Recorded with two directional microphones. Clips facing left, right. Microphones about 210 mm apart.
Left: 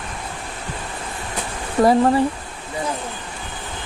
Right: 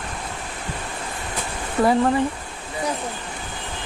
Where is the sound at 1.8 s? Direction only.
40° left (ahead or behind).